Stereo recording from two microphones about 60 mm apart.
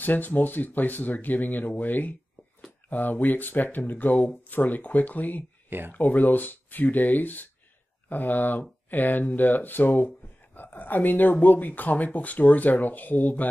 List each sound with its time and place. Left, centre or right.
0.0 s speech: left
5.7 s speech: right
5.9 s speech: left